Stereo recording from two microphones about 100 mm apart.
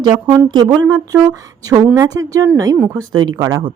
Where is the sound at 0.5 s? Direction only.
45° right (ahead or behind).